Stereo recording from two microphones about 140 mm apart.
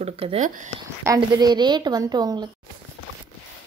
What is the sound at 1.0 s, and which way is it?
A woman's voice, 25° right (ahead or behind).